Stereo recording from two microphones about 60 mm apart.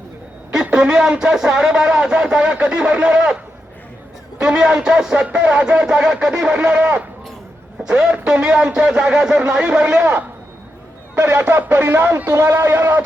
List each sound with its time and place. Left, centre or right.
0.5 s speech: centre
4.4 s speech: centre
11.1 s speech: right
12.3 s speech: right